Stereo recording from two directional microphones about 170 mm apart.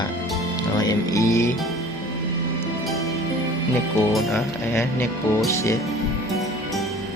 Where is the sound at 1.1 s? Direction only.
20° left (ahead or behind).